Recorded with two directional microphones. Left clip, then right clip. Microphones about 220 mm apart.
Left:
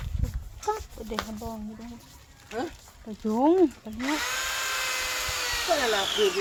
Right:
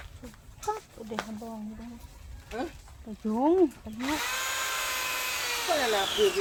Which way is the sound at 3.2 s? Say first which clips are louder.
Left 3 dB; 20° left (ahead or behind).